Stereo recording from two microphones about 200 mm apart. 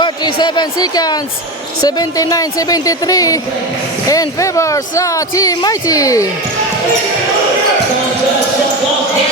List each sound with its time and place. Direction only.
0.3 s a woman's voice: 20° left (ahead or behind)